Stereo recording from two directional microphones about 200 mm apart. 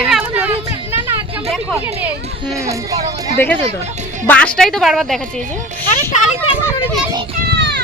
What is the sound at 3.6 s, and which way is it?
Speech, 35° right (ahead or behind).